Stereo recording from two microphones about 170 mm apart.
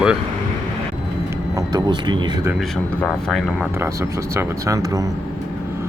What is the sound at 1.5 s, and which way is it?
Speech, 25° right (ahead or behind).